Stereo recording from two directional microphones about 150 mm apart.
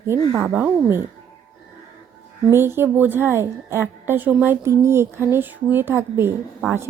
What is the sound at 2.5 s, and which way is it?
A woman's voice, 15° right (ahead or behind).